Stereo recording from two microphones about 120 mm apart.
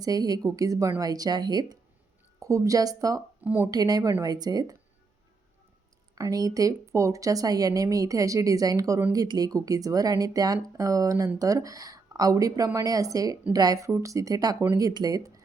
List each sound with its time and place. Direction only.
0.0 s speech: 30° right (ahead or behind)
3.4 s speech: 15° right (ahead or behind)
3.7 s speech: 30° right (ahead or behind)
6.1 s speech: 30° right (ahead or behind)